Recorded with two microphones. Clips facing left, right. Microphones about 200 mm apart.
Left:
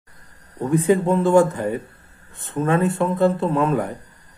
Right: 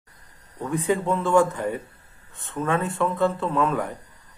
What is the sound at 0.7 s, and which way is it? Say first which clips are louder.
Speech: left 6 dB; 35° left (ahead or behind).